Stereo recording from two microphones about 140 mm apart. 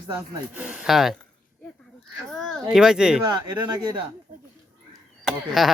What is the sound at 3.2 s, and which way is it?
Speech, 30° right (ahead or behind).